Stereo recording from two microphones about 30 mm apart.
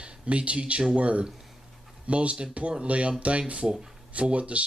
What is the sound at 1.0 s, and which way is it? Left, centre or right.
Speech, right.